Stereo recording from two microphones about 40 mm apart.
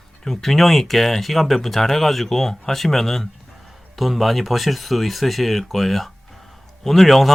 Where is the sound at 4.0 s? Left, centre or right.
Centre.